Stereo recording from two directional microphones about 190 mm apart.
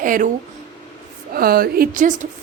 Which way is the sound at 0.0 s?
45° right (ahead or behind).